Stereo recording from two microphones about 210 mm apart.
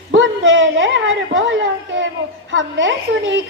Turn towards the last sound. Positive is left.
turn(degrees=-60)  # may be behind; listen again after turning